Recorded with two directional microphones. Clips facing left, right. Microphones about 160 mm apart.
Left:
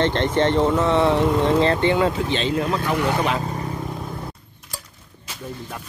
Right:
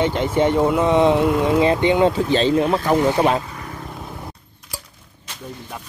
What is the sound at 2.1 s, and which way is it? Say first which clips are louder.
Speech: right 5 dB; 35° right (ahead or behind).